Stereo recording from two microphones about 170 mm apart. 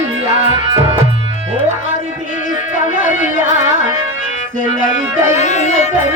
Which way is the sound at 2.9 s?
50° left (ahead or behind).